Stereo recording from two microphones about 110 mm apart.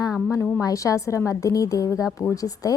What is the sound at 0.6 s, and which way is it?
A woman's voice, 30° left (ahead or behind).